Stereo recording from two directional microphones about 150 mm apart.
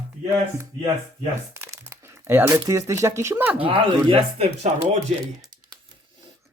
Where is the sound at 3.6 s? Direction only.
35° right (ahead or behind).